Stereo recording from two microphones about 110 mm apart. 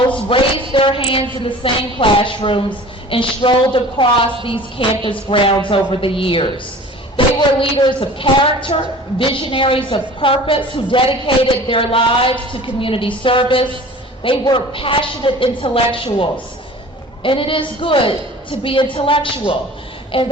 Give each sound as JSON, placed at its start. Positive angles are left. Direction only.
{"t": 0.3, "sound": "a woman's voice", "side_deg": 55}
{"t": 17.2, "sound": "a woman's voice", "side_deg": 55}
{"t": 20.1, "sound": "child singing", "side_deg": 55}